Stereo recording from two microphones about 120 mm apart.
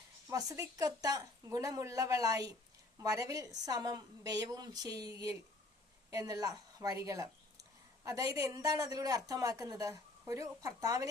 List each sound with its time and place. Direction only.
0.3 s a woman's voice: 25° right (ahead or behind)